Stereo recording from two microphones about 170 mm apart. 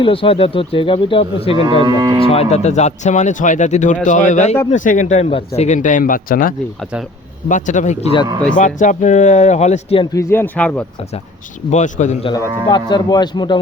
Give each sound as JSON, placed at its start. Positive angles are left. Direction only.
{"t": 0.0, "sound": "speech", "side_deg": 30}
{"t": 1.5, "sound": "cattle", "side_deg": -30}
{"t": 2.2, "sound": "speech", "side_deg": 35}
{"t": 10.2, "sound": "speech", "side_deg": 15}
{"t": 11.7, "sound": "speech", "side_deg": 45}
{"t": 12.6, "sound": "a man's voice", "side_deg": 25}